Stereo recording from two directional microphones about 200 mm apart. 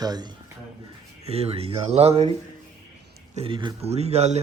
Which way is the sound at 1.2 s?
30° right (ahead or behind).